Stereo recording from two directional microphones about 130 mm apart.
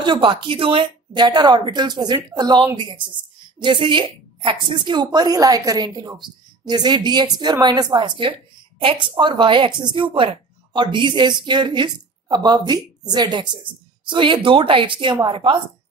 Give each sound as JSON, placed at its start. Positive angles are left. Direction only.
{"t": 0.0, "sound": "a woman's voice", "side_deg": -40}